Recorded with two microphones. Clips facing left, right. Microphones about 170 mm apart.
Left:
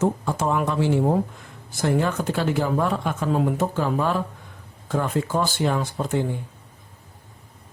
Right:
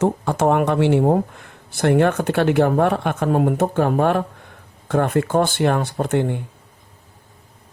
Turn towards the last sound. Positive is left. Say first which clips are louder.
# right 4 dB
turn(degrees=-65)  # may be behind; listen again after turning